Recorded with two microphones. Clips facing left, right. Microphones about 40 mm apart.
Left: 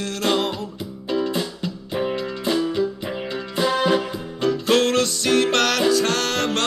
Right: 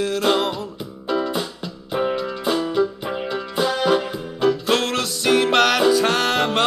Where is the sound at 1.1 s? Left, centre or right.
Right.